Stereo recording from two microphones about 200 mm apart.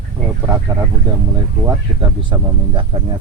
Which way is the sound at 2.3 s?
25° right (ahead or behind).